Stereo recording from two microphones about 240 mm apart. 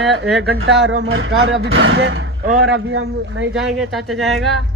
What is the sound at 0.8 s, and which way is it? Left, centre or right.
Speech, right.